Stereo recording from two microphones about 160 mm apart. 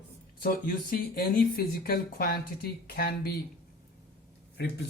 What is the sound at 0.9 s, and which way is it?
Speech, 70° left (ahead or behind).